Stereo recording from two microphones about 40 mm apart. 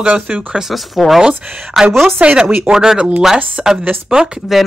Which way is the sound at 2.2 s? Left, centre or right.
Right.